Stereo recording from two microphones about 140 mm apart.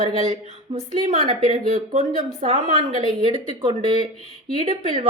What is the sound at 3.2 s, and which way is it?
A woman's voice, 35° right (ahead or behind).